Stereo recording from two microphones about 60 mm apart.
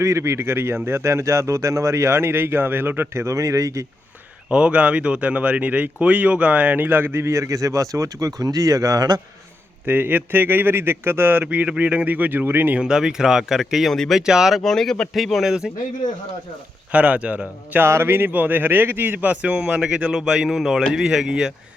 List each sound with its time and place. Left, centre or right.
0.0 s speech: right
3.2 s a man's voice: right
4.4 s a man's voice: centre; by 7.2 s right
7.2 s speech: right
9.8 s a man's voice: right
11.4 s speech: right
12.8 s a man's voice: centre
13.9 s speech: centre
14.2 s a man's voice: centre
14.6 s speech: centre
15.1 s speech: centre
16.9 s speech: right
17.7 s a man's voice: right; by 21.5 s centre